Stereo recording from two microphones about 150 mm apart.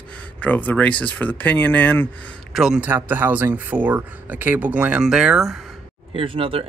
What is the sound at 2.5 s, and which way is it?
Speech, 5° right (ahead or behind).